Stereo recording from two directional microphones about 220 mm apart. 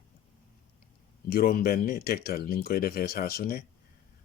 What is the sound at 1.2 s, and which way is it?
Speech, 40° left (ahead or behind).